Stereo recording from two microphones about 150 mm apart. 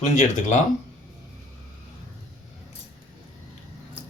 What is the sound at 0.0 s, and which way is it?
Speech, 55° left (ahead or behind).